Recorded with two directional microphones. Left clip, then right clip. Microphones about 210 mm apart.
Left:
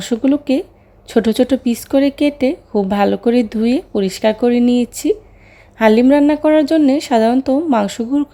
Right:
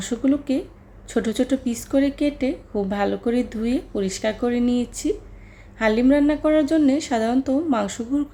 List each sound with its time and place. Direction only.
0.0 s speech: 30° left (ahead or behind)